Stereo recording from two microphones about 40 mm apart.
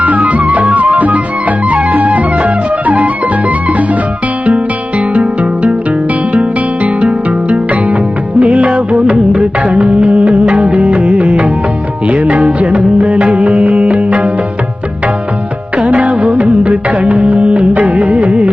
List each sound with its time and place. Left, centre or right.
0.0 s music: right
4.4 s music: right
15.8 s music: right